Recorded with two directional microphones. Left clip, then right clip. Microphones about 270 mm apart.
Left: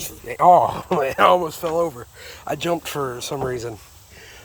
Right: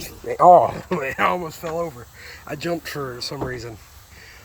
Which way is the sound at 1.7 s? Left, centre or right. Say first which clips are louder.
Left 4 dB; left.